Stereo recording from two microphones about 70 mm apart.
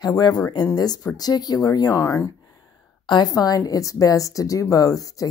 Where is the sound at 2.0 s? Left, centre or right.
Left.